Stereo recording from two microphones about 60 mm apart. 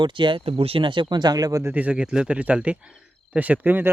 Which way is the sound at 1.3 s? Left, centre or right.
Right.